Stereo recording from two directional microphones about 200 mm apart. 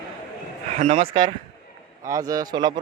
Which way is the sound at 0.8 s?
35° right (ahead or behind).